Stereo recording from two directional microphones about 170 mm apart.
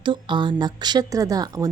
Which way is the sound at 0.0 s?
30° right (ahead or behind).